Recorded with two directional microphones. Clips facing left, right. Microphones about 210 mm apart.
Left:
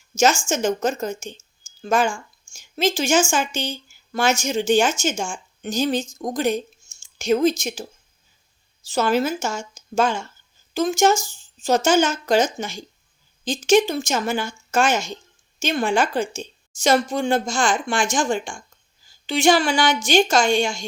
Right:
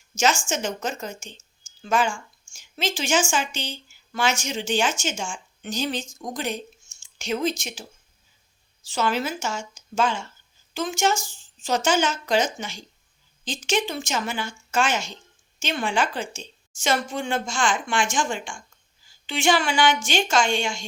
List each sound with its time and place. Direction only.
0.2 s a woman's voice: 40° left (ahead or behind)